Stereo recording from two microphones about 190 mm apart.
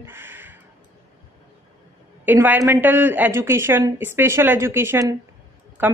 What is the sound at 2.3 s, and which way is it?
A woman's voice, 10° right (ahead or behind).